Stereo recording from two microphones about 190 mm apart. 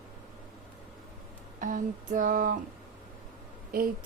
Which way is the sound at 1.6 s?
45° right (ahead or behind).